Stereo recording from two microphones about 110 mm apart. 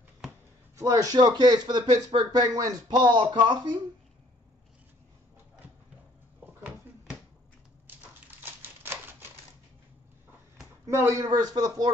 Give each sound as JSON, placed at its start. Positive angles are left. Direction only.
{"t": 0.7, "sound": "a man's voice", "side_deg": -25}
{"t": 1.1, "sound": "speech", "side_deg": -40}
{"t": 8.4, "sound": "a sound", "side_deg": -20}
{"t": 10.9, "sound": "speech", "side_deg": -25}